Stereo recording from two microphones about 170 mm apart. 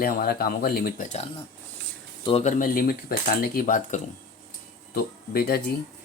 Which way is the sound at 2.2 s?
40° left (ahead or behind).